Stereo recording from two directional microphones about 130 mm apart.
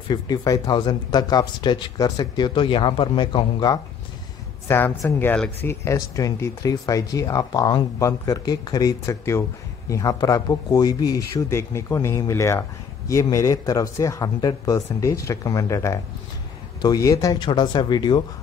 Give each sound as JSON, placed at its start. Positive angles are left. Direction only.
{"t": 0.1, "sound": "speech", "side_deg": 30}
{"t": 4.6, "sound": "speech", "side_deg": 15}